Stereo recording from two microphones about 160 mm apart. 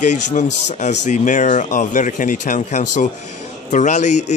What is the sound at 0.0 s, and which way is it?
Speech, 50° left (ahead or behind).